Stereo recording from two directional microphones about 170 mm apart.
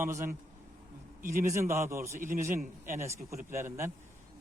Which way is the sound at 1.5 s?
15° right (ahead or behind).